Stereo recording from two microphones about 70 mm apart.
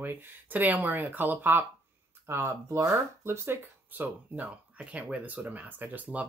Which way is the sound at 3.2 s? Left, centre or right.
Right.